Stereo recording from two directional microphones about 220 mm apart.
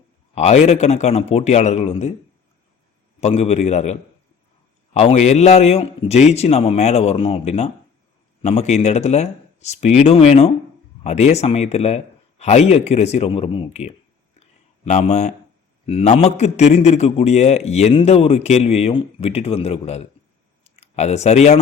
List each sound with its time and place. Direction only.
0.3 s a man's voice: 30° left (ahead or behind)
3.2 s a man's voice: 30° left (ahead or behind)
4.9 s a man's voice: 30° left (ahead or behind)